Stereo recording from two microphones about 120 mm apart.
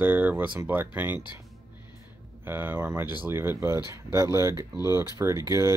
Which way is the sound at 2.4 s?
20° right (ahead or behind).